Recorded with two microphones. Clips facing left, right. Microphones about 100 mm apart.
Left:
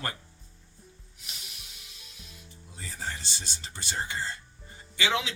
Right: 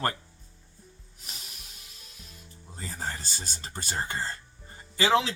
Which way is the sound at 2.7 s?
40° right (ahead or behind).